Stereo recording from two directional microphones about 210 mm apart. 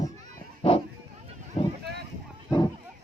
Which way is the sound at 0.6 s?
25° left (ahead or behind).